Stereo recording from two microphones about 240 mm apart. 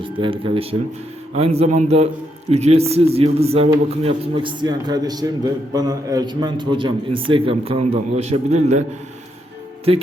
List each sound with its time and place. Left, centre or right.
0.0 s a man's voice: right